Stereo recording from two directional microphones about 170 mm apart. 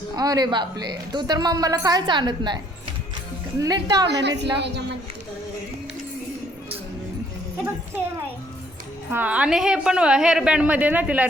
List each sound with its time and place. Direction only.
0.2 s a woman's voice: 25° right (ahead or behind)
3.6 s a woman's voice: 25° right (ahead or behind)
4.1 s a woman's voice: 85° right
9.1 s a woman's voice: 10° right (ahead or behind)